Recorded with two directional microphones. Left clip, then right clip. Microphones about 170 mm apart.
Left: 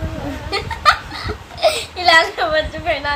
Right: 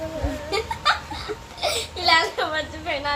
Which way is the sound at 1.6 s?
15° left (ahead or behind).